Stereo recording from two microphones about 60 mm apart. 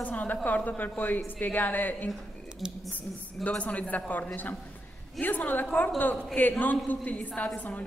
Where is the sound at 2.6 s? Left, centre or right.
Centre.